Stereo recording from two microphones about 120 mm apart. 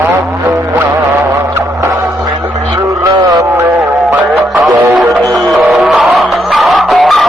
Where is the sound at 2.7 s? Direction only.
25° right (ahead or behind).